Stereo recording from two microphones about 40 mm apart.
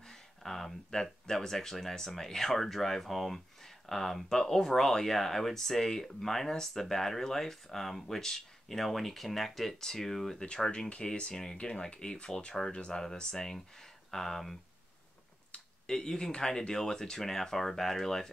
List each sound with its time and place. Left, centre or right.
0.1 s a sound: centre
1.2 s speech: centre
10.3 s speech: left; by 14.6 s centre
15.9 s speech: centre